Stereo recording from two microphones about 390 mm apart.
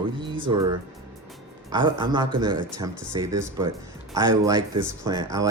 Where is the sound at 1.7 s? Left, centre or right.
Centre.